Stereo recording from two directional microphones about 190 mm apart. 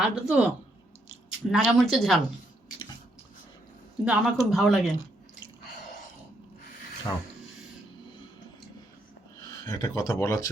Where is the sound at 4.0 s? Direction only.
5° right (ahead or behind).